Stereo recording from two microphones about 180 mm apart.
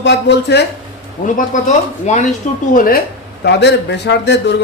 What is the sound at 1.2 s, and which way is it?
Speech, 45° left (ahead or behind).